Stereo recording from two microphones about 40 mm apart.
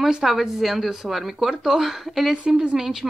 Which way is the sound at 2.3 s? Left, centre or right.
Right.